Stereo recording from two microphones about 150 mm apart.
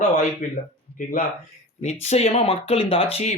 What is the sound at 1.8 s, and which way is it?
Speech, 45° left (ahead or behind).